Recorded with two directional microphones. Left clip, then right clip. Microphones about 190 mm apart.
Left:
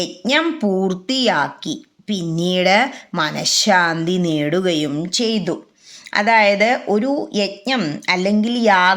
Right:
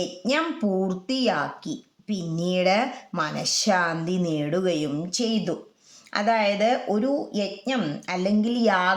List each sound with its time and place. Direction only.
0.0 s speech: 20° left (ahead or behind)